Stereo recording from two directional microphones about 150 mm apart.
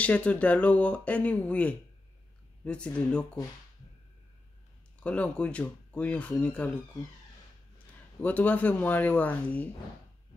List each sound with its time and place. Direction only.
0.0 s speech: 10° left (ahead or behind)
5.0 s speech: 10° left (ahead or behind)
8.2 s speech: 10° left (ahead or behind)